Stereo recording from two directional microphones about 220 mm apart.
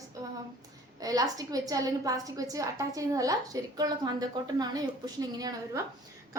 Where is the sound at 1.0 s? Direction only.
15° right (ahead or behind).